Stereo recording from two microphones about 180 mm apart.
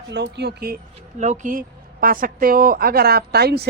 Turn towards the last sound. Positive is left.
turn(degrees=-65)  # may be behind; listen again after turning